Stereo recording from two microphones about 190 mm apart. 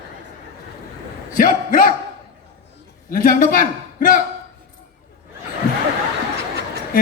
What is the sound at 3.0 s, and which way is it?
A man's voice, 45° left (ahead or behind).